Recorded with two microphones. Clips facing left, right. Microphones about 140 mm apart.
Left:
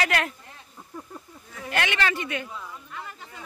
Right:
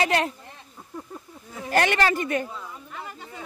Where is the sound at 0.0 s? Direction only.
30° right (ahead or behind).